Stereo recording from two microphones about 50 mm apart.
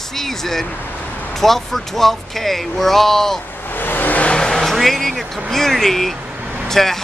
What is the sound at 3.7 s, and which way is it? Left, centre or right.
Vehicle, left.